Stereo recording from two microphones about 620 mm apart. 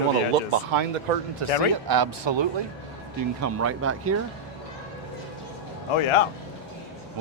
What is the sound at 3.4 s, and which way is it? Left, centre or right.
Speech, right.